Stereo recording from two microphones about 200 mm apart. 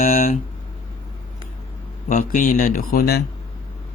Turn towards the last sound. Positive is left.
turn(degrees=50)  # may be behind; listen again after turning